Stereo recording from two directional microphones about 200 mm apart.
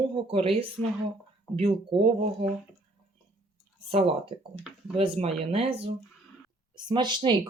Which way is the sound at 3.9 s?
30° right (ahead or behind).